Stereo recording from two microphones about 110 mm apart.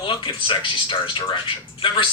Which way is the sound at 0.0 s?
50° left (ahead or behind).